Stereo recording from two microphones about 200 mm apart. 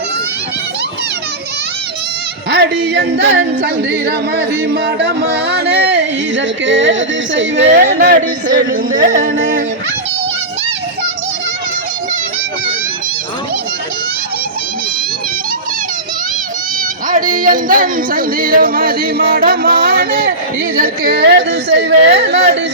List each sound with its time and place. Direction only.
2.5 s music: 55° right (ahead or behind)
7.9 s speech: 45° right (ahead or behind)
17.1 s speech: 40° right (ahead or behind); by 22.4 s 60° right (ahead or behind)